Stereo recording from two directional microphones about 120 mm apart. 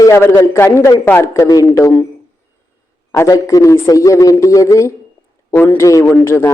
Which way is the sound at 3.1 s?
30° left (ahead or behind).